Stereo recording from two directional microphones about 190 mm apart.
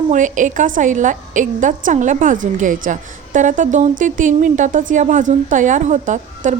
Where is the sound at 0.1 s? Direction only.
40° right (ahead or behind).